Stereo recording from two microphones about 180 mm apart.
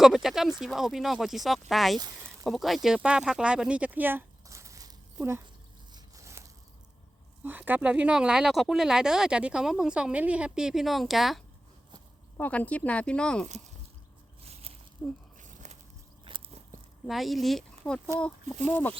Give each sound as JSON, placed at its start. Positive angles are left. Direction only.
{"t": 0.0, "sound": "speech", "side_deg": 0}
{"t": 5.9, "sound": "a sound", "side_deg": -15}
{"t": 7.4, "sound": "speech", "side_deg": -10}
{"t": 15.0, "sound": "speech", "side_deg": 5}
{"t": 15.4, "sound": "a sound", "side_deg": -45}
{"t": 16.2, "sound": "biting", "side_deg": -30}
{"t": 17.1, "sound": "speech", "side_deg": 0}